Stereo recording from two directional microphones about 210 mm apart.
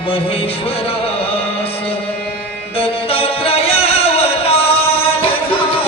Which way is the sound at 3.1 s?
25° left (ahead or behind).